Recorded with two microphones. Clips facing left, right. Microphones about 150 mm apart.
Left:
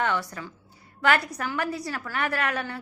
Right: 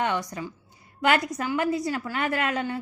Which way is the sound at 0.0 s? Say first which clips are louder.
Right 1 dB; 20° right (ahead or behind).